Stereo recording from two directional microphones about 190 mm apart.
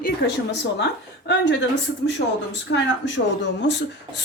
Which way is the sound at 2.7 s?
70° left (ahead or behind).